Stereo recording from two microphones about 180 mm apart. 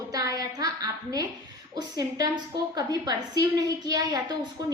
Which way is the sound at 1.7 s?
20° right (ahead or behind).